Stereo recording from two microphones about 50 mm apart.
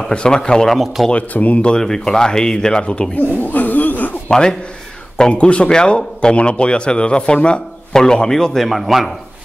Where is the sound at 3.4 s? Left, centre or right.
Left.